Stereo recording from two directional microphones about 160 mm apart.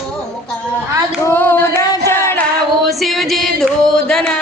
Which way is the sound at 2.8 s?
Centre (ahead or behind).